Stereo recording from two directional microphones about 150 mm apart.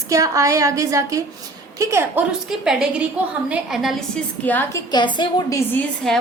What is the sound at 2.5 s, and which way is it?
A woman's voice, 5° right (ahead or behind).